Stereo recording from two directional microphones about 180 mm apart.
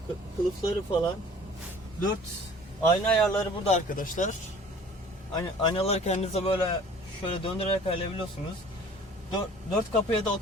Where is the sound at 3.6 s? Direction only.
40° left (ahead or behind).